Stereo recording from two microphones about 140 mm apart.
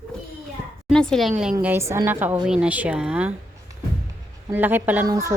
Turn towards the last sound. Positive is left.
turn(degrees=-20)  # may be behind; listen again after turning